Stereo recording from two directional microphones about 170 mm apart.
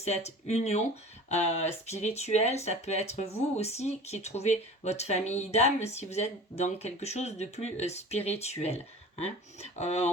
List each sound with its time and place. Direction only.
0.0 s speech: 40° left (ahead or behind)